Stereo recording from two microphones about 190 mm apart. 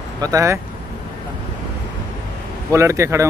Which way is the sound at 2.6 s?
15° right (ahead or behind).